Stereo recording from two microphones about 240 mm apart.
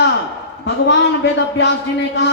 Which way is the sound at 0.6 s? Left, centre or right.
Left.